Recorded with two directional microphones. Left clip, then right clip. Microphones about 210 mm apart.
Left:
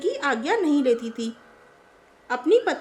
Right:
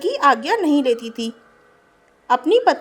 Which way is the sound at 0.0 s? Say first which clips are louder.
Right 8 dB; 25° right (ahead or behind).